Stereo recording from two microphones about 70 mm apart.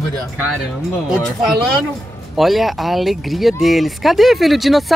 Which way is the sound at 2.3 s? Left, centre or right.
Centre.